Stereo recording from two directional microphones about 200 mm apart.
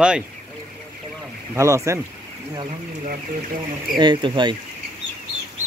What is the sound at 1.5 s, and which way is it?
Speech, 15° right (ahead or behind).